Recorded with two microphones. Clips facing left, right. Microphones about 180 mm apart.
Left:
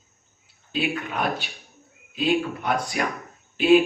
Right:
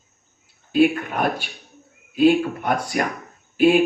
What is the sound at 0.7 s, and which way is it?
A man's voice, 50° right (ahead or behind).